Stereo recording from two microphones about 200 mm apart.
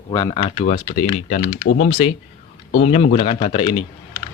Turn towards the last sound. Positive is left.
turn(degrees=25)  # may be behind; listen again after turning